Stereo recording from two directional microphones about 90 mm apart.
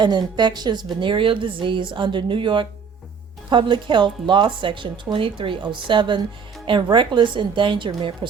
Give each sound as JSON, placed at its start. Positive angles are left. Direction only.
{"t": 0.0, "sound": "speech", "side_deg": -55}
{"t": 0.9, "sound": "speech", "side_deg": -65}